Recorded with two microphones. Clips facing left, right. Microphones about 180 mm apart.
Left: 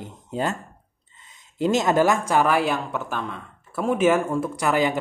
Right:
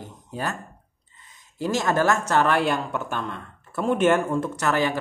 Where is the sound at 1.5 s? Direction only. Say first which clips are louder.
Left 3 dB; 20° left (ahead or behind).